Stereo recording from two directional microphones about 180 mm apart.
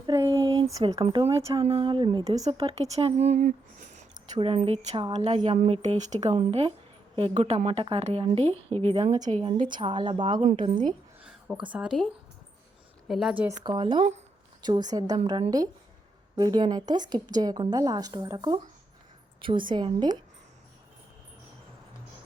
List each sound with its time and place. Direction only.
0.0 s a sound: 20° right (ahead or behind)
0.9 s a woman's voice: 30° right (ahead or behind)
2.3 s a woman's voice: 20° right (ahead or behind)
2.6 s a woman's voice: 35° right (ahead or behind)
4.3 s a woman's voice: 30° right (ahead or behind)
5.4 s a woman's voice: 40° right (ahead or behind)
10.4 s a woman's voice: 45° right (ahead or behind)
11.2 s a sound: 5° right (ahead or behind)
11.7 s speech: 5° right (ahead or behind)
13.1 s speech: centre (ahead or behind)
13.7 s a woman's voice: 25° right (ahead or behind)